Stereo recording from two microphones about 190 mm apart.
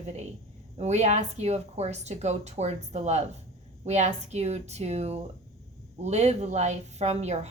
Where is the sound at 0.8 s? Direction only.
35° right (ahead or behind).